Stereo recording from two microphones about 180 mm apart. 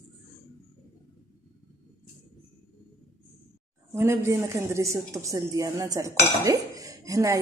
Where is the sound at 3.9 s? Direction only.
15° right (ahead or behind).